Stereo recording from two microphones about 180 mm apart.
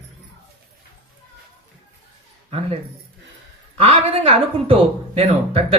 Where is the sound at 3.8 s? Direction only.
35° right (ahead or behind).